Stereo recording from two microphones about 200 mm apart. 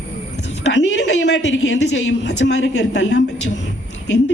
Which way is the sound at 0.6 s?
65° left (ahead or behind).